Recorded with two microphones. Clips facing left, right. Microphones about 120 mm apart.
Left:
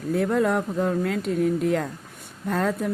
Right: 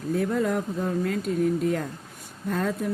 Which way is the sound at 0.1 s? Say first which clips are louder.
Left 3 dB; 65° left (ahead or behind).